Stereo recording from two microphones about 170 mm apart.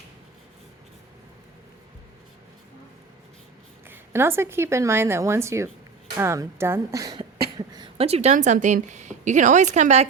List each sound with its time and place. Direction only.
3.8 s speech: 15° right (ahead or behind); by 10.1 s 40° right (ahead or behind)